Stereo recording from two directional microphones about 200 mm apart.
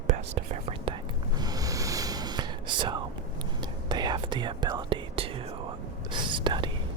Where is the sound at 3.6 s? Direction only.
20° right (ahead or behind).